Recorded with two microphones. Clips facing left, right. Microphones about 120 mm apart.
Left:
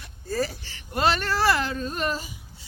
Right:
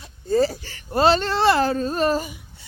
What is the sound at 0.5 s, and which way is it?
A woman's voice, 45° right (ahead or behind).